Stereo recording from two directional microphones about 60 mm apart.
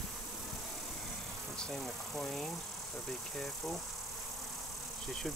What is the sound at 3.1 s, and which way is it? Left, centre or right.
Speech, centre.